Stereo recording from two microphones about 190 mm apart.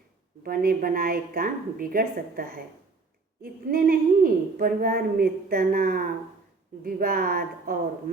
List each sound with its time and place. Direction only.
0.4 s a woman's voice: 50° right (ahead or behind)